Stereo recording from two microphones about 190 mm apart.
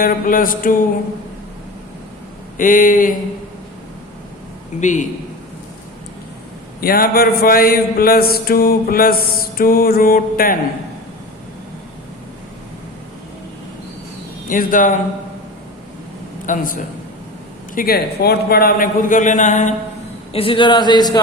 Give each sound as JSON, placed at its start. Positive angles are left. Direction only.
{"t": 0.0, "sound": "mantra", "side_deg": 50}
{"t": 2.6, "sound": "mantra", "side_deg": 45}
{"t": 4.8, "sound": "a man's voice", "side_deg": 40}
{"t": 6.8, "sound": "mantra", "side_deg": 50}
{"t": 14.5, "sound": "mantra", "side_deg": 45}
{"t": 16.5, "sound": "mantra", "side_deg": 45}
{"t": 20.3, "sound": "speech", "side_deg": 30}